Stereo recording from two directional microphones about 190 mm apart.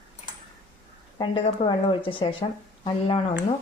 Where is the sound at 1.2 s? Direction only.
25° left (ahead or behind).